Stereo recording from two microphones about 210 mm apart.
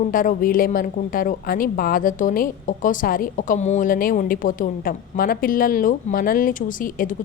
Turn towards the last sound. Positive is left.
turn(degrees=40)  # may be behind; listen again after turning